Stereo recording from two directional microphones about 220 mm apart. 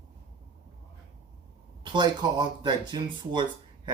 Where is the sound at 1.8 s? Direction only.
20° right (ahead or behind).